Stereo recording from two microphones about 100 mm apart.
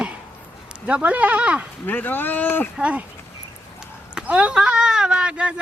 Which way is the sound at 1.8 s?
20° left (ahead or behind).